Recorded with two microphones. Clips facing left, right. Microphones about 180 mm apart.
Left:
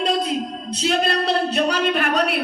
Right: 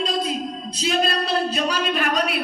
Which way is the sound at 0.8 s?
60° left (ahead or behind).